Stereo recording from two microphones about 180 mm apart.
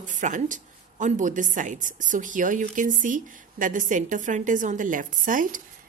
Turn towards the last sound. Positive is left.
turn(degrees=-50)  # may be behind; listen again after turning